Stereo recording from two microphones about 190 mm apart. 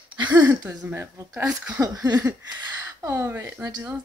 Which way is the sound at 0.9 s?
10° right (ahead or behind).